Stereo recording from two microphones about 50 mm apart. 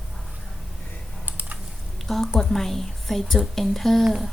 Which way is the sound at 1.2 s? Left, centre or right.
Right.